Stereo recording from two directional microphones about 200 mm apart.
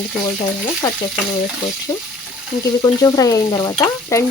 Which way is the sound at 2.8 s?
20° left (ahead or behind).